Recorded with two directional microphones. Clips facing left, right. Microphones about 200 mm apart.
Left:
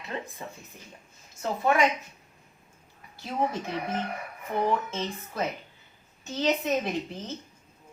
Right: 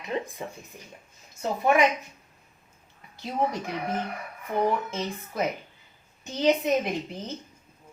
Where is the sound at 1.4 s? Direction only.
15° right (ahead or behind).